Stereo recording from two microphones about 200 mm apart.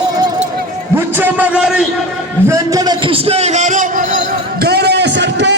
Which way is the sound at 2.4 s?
15° right (ahead or behind).